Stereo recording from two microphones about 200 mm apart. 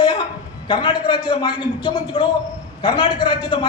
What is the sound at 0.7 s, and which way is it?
Speech, 25° left (ahead or behind).